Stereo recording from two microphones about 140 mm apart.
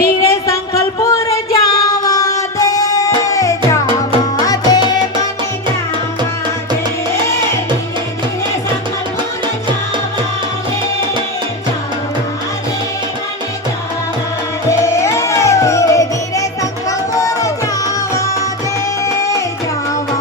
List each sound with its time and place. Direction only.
0.2 s music: 25° left (ahead or behind)
4.4 s tabla: 25° left (ahead or behind)
14.7 s music: 20° left (ahead or behind)